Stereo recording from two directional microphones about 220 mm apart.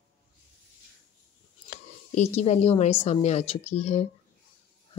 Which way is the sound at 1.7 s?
35° left (ahead or behind).